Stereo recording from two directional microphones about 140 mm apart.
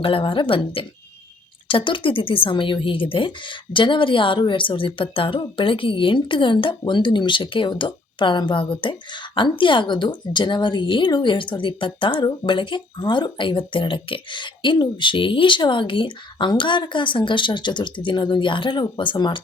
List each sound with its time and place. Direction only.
0.0 s speech: 40° left (ahead or behind)